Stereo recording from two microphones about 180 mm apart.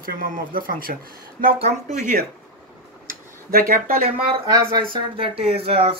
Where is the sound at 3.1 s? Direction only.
50° right (ahead or behind).